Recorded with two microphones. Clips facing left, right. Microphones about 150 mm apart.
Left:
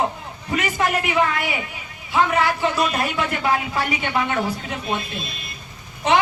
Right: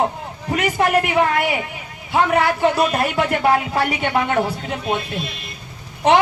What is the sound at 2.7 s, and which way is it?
Speech, 60° right (ahead or behind).